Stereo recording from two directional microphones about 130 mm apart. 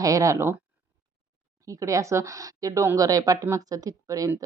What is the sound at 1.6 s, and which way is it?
Speech, 25° right (ahead or behind).